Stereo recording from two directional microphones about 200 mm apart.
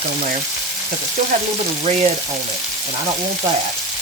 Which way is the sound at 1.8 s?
35° right (ahead or behind).